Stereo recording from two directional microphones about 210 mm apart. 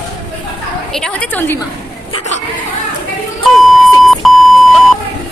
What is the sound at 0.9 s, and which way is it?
Speech, 5° left (ahead or behind).